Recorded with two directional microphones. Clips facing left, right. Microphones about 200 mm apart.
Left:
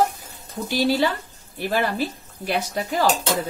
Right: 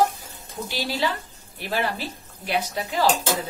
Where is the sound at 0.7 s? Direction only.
45° left (ahead or behind).